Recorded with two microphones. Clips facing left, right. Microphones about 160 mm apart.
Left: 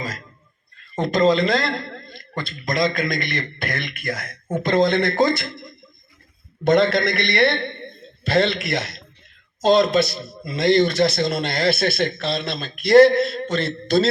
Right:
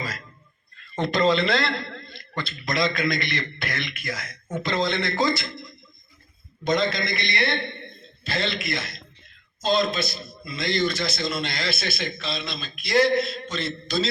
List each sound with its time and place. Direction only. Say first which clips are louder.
0.9 s a man's voice: left 4 dB; 45° left (ahead or behind)
6.7 s a man's voice: left 7 dB; 65° left (ahead or behind)